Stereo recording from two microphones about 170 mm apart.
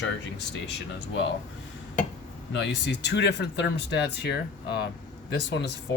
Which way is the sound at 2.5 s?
85° left.